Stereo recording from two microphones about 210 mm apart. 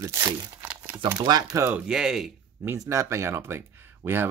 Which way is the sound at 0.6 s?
5° right (ahead or behind).